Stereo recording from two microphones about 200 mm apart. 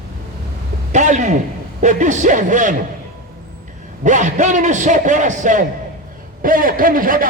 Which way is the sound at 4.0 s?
35° right (ahead or behind).